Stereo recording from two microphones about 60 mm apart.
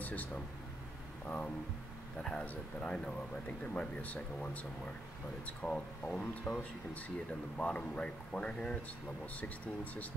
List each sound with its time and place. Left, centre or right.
0.0 s speech: left
2.1 s speech: centre